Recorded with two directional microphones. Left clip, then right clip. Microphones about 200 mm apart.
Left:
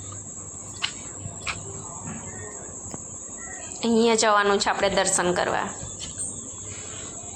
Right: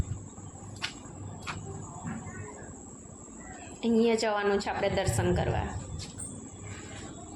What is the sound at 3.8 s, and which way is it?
A woman's voice, 5° left (ahead or behind).